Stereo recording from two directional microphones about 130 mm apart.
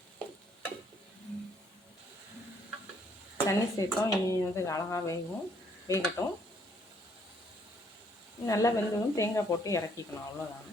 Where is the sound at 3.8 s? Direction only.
25° left (ahead or behind).